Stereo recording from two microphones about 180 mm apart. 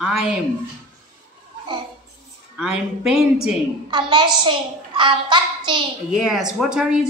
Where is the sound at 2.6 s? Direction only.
5° right (ahead or behind).